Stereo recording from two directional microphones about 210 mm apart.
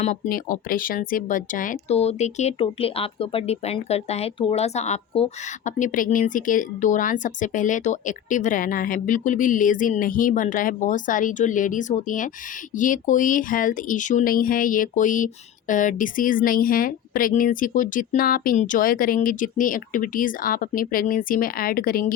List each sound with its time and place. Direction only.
0.0 s speech: 40° left (ahead or behind)